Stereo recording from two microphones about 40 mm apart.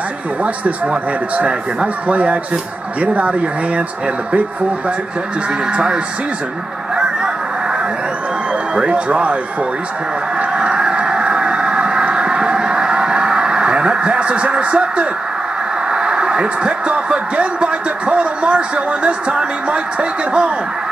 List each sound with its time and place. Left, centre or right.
2.0 s speech: right
5.7 s speech: right
7.0 s vehicle: centre
8.7 s speech: right
10.5 s fowl: right
11.1 s a sound: centre
15.9 s speech: centre